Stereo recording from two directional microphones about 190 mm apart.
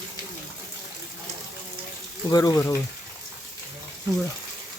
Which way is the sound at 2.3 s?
20° left (ahead or behind).